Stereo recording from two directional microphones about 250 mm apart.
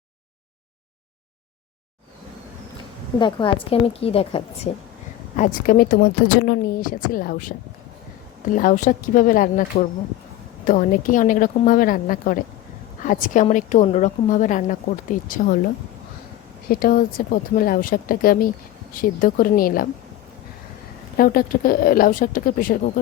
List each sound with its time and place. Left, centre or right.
3.2 s a woman's voice: centre
5.4 s speech: left
8.5 s speech: left
10.7 s speech: left
16.6 s speech: left
21.2 s speech: left